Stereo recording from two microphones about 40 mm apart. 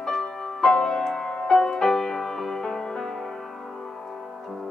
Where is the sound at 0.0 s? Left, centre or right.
Centre.